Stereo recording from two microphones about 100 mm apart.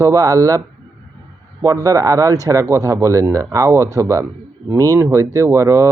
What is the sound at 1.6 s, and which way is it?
Speech, 35° right (ahead or behind).